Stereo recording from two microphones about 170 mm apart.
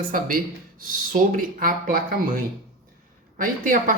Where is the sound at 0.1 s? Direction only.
55° right (ahead or behind).